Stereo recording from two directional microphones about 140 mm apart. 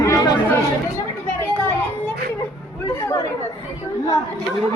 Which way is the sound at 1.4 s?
20° left (ahead or behind).